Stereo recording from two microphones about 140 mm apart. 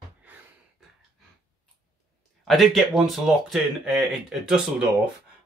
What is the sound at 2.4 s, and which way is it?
Speech, centre (ahead or behind).